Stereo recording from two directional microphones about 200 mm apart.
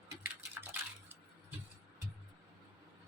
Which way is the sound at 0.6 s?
10° right (ahead or behind).